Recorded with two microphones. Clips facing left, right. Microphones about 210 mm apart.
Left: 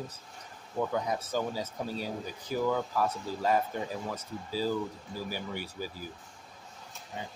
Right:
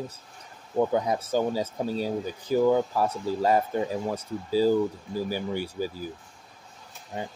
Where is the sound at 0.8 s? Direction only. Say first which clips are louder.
Right 7 dB; 30° right (ahead or behind).